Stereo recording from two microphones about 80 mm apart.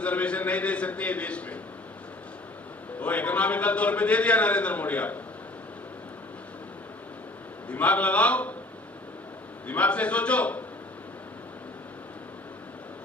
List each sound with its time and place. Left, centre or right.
0.0 s a man's voice: centre
3.0 s a man's voice: centre
7.7 s a man's voice: centre
9.6 s a man's voice: centre